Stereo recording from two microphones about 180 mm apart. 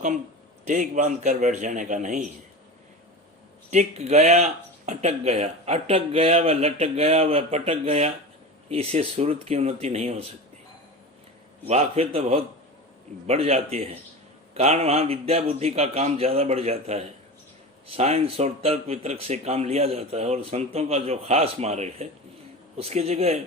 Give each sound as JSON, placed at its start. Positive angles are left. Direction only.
{"t": 0.7, "sound": "a man's voice", "side_deg": -45}
{"t": 3.7, "sound": "speech", "side_deg": -40}
{"t": 11.7, "sound": "speech", "side_deg": -35}